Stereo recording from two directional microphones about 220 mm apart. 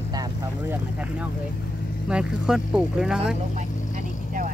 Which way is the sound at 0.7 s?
5° right (ahead or behind).